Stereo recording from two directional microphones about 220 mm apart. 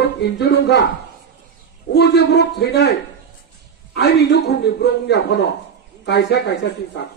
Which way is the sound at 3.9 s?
50° left (ahead or behind).